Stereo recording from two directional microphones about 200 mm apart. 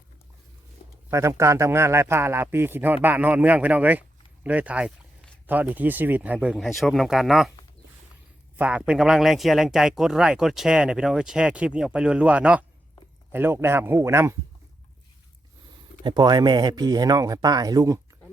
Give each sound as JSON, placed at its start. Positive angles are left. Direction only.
{"t": 1.1, "sound": "a man's voice", "side_deg": -15}
{"t": 8.5, "sound": "a man's voice", "side_deg": -5}
{"t": 16.0, "sound": "speech", "side_deg": -20}